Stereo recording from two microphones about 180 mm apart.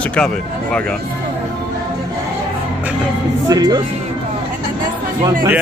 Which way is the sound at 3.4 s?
20° right (ahead or behind).